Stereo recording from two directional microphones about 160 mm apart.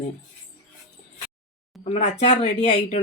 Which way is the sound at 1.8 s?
40° left (ahead or behind).